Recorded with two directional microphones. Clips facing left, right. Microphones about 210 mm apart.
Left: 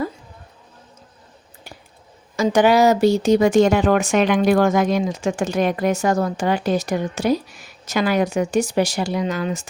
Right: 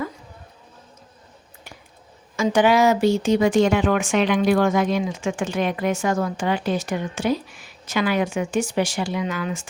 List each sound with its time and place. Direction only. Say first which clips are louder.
2.3 s speech: left 2 dB; 40° left (ahead or behind)